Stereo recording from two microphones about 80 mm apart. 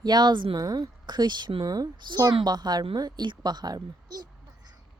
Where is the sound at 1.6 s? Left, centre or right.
Right.